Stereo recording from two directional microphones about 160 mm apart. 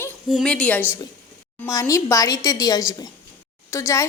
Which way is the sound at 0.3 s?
Centre (ahead or behind).